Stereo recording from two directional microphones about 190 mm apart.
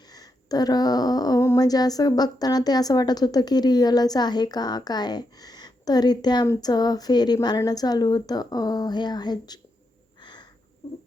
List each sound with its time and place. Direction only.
0.1 s speech: 20° left (ahead or behind)